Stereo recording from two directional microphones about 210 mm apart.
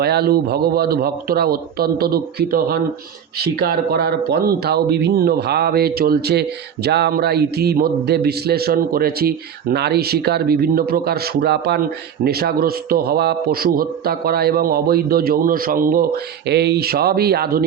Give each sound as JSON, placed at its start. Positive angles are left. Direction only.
{"t": 0.0, "sound": "a man's voice", "side_deg": -50}